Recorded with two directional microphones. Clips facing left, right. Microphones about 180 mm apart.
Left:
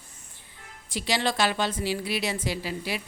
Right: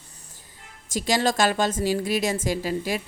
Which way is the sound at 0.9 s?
45° right (ahead or behind).